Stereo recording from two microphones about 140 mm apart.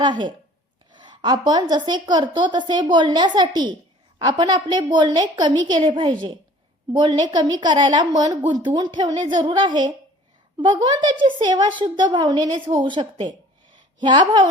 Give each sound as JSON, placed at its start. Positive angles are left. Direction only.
{"t": 0.0, "sound": "a woman's voice", "side_deg": -35}